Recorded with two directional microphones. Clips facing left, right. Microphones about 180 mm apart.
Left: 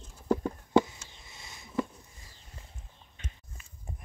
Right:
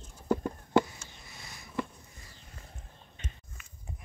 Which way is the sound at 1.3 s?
25° left (ahead or behind).